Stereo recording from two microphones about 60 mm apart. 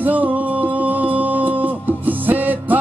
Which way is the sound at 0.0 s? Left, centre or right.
Right.